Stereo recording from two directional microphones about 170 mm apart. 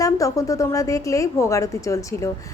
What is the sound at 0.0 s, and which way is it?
A woman's voice, 20° left (ahead or behind).